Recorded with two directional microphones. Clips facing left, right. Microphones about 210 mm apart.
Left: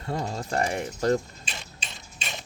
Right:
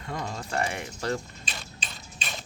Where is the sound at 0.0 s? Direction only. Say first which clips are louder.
Left 4 dB; 35° left (ahead or behind).